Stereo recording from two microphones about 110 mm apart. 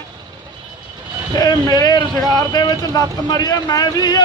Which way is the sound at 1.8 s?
35° left (ahead or behind).